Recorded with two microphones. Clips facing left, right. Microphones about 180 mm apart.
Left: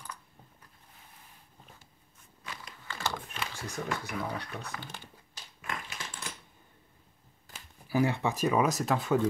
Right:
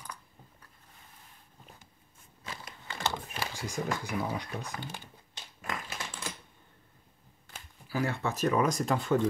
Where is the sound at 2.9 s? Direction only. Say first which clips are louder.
Right 1 dB; 25° right (ahead or behind).